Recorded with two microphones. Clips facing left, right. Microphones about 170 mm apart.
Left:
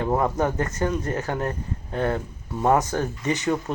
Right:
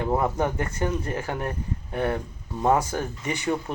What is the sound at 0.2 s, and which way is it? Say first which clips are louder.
Speech: left 2 dB; 10° right (ahead or behind).